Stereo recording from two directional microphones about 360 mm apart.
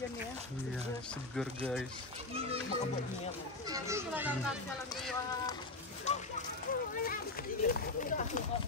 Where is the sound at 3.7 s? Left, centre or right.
Centre.